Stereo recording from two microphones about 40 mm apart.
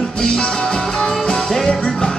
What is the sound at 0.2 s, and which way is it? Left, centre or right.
Music, centre.